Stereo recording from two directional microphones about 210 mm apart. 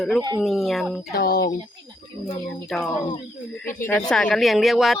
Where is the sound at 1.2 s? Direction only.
45° left (ahead or behind).